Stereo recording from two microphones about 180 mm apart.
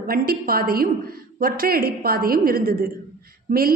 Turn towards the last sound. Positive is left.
turn(degrees=-55)  # may be behind; listen again after turning